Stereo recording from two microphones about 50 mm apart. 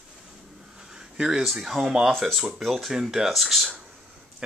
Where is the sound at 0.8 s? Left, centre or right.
Centre.